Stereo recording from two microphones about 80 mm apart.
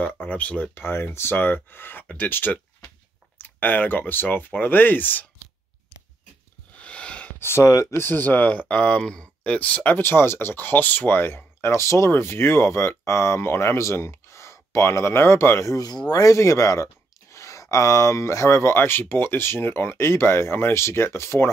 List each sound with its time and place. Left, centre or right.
0.0 s speech: centre
0.8 s speech: left
6.8 s a sound: centre
7.3 s speech: left